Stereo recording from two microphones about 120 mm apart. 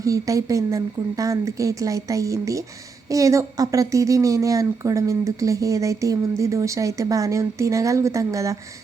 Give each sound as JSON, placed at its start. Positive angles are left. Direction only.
{"t": 0.0, "sound": "a woman's voice", "side_deg": -30}